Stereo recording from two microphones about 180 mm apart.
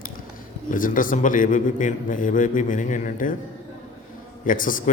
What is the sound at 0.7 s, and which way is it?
A man's voice, 50° left (ahead or behind).